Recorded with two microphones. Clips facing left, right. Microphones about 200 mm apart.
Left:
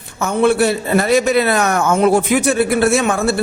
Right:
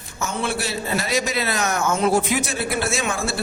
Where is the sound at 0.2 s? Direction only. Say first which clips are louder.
Left 12 dB; 55° left (ahead or behind).